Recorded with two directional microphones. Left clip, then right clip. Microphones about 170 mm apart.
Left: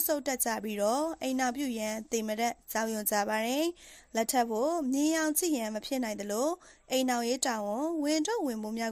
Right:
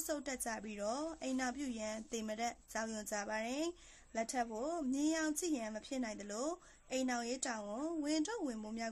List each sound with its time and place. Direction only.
0.1 s a woman's voice: 40° left (ahead or behind)